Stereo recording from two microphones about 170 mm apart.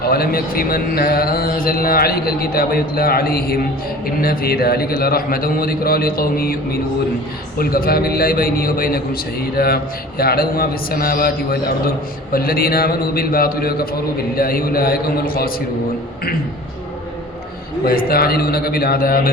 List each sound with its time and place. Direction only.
0.0 s a man's voice: 65° left (ahead or behind)
17.8 s a man's voice: 60° left (ahead or behind)